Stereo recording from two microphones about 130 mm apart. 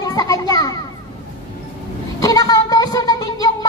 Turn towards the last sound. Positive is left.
turn(degrees=30)  # may be behind; listen again after turning